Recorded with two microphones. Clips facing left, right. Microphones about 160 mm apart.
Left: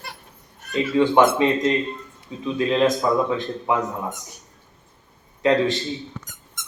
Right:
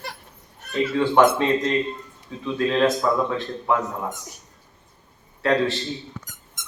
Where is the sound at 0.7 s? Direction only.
15° left (ahead or behind).